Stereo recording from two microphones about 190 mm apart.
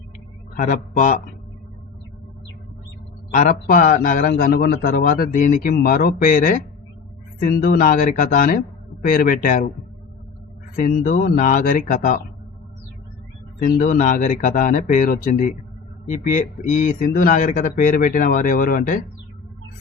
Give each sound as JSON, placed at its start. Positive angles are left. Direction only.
{"t": 0.5, "sound": "a man's voice", "side_deg": 45}
{"t": 3.3, "sound": "a man's voice", "side_deg": 45}
{"t": 10.8, "sound": "a man's voice", "side_deg": 45}
{"t": 13.6, "sound": "a man's voice", "side_deg": 45}